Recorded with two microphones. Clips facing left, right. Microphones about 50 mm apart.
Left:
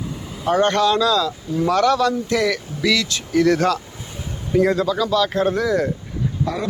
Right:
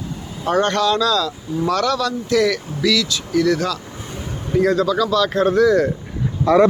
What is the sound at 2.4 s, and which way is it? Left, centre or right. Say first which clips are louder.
Speech: right 2 dB; centre.